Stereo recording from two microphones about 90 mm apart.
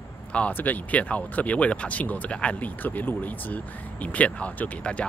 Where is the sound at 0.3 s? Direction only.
15° left (ahead or behind).